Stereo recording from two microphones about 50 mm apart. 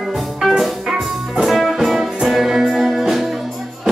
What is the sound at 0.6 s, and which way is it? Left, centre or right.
Music, centre.